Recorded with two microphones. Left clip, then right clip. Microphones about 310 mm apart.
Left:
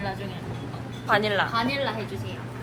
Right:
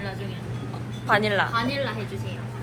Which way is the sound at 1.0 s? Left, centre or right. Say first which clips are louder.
Right 1 dB; centre.